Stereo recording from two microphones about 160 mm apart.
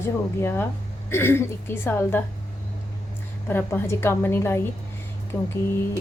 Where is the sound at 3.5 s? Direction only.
15° left (ahead or behind).